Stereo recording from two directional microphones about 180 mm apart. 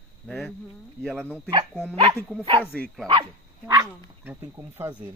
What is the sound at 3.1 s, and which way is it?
Speech, 20° right (ahead or behind).